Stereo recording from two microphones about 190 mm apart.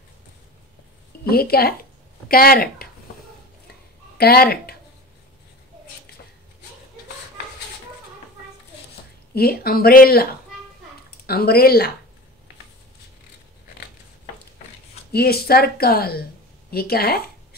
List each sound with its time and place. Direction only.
1.2 s speech: 55° left (ahead or behind)
4.2 s speech: 55° left (ahead or behind)
9.3 s speech: 55° left (ahead or behind)
15.1 s speech: 55° left (ahead or behind)